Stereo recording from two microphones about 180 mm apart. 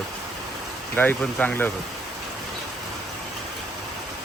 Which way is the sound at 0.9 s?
10° left (ahead or behind).